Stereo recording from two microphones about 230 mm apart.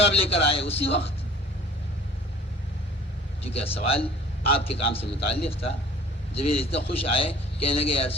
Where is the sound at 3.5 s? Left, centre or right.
Left.